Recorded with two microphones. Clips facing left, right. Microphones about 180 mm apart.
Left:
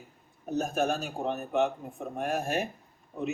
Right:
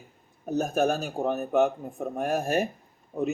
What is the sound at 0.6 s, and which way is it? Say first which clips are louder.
A man's voice: right 4 dB; 45° right (ahead or behind).